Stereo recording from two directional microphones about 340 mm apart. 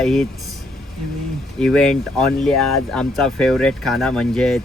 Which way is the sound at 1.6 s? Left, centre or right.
Centre.